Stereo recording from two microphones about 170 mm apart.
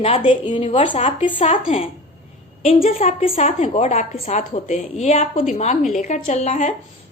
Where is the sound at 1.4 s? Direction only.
45° left (ahead or behind).